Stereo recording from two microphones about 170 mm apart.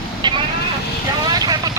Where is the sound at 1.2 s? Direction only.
25° right (ahead or behind).